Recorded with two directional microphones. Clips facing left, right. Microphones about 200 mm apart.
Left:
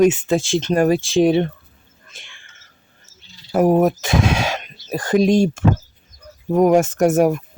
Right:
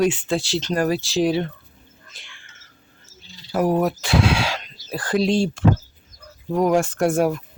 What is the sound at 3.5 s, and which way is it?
Speech, 25° left (ahead or behind).